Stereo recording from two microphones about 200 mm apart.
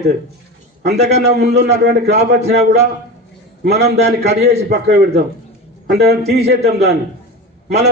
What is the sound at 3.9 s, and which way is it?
Speech, 35° right (ahead or behind).